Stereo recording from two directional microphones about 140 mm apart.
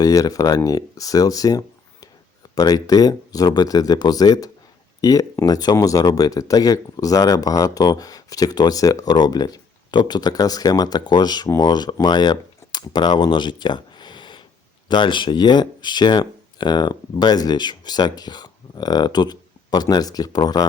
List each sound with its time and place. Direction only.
0.0 s speech: 25° left (ahead or behind)